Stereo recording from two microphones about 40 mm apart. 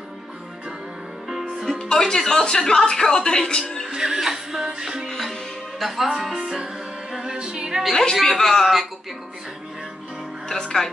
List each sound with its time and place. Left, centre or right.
1.7 s music: centre
2.4 s a woman's voice: centre
3.9 s music: centre
5.8 s music: centre
7.2 s a capella: right
7.9 s speech: centre
10.5 s speech: centre